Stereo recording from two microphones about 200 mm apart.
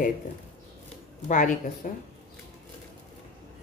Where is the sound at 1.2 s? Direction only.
40° left (ahead or behind).